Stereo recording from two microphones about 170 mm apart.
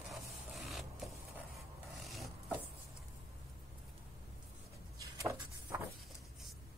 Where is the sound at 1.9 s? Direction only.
Centre (ahead or behind).